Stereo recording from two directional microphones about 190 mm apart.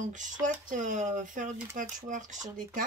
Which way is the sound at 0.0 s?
40° right (ahead or behind).